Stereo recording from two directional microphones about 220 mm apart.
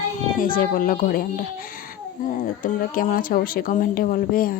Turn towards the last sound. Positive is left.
turn(degrees=40)  # may be behind; listen again after turning